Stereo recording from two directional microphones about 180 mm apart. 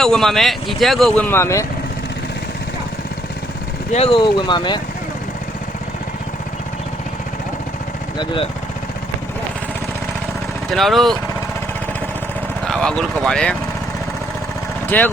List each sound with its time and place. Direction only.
0.0 s speech: centre (ahead or behind)
3.9 s speech: 30° left (ahead or behind)
10.7 s speech: centre (ahead or behind)
12.6 s speech: 5° left (ahead or behind)
14.8 s speech: 10° left (ahead or behind)